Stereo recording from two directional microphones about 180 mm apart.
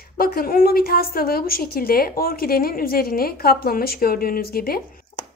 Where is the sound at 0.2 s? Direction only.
55° left (ahead or behind).